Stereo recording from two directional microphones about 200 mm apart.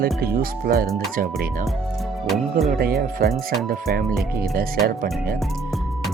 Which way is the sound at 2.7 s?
50° right (ahead or behind).